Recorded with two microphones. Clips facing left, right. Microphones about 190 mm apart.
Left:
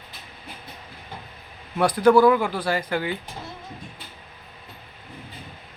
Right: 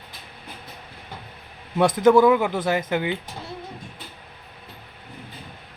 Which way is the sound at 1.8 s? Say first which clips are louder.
Right 1 dB; 20° right (ahead or behind).